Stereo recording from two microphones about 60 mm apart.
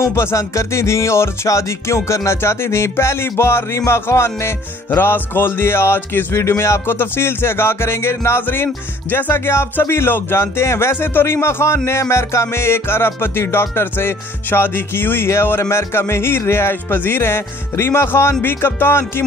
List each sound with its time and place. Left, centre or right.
0.1 s speech: left
4.8 s speech: left